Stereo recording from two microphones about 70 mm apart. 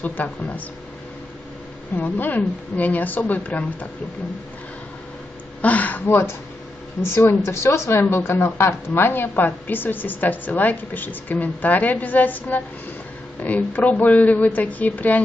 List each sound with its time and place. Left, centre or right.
0.0 s speech: left
2.0 s speech: left
5.6 s speech: left
6.0 s speech: left